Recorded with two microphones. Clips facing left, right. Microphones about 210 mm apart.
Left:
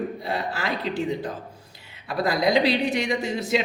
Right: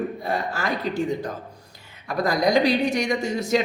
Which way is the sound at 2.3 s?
45° right (ahead or behind).